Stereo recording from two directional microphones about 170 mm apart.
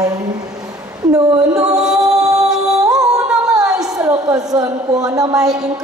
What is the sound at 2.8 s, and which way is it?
Music, 20° right (ahead or behind).